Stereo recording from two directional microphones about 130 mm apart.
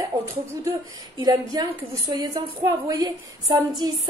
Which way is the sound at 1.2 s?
30° right (ahead or behind).